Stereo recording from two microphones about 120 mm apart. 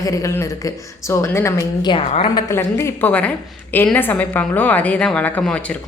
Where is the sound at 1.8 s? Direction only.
40° left (ahead or behind).